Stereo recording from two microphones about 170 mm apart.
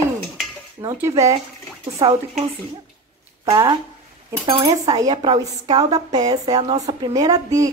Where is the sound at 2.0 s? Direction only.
35° right (ahead or behind).